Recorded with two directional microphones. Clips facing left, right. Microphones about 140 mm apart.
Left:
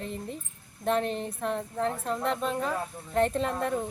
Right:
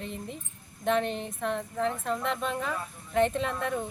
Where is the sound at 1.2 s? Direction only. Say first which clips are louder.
Left 1 dB; centre (ahead or behind).